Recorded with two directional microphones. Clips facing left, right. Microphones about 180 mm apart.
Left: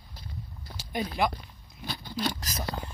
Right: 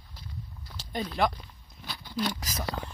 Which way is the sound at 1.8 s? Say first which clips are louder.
Even; 35° left (ahead or behind).